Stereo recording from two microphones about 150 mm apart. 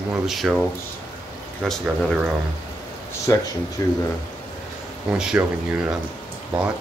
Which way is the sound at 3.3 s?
20° left (ahead or behind).